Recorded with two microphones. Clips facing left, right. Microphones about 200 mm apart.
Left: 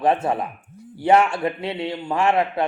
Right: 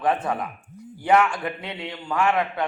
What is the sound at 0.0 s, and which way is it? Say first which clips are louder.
A man's voice: left 4 dB; 25° left (ahead or behind).